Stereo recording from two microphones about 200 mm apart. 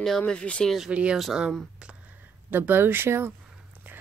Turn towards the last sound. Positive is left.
turn(degrees=-10)  # may be behind; listen again after turning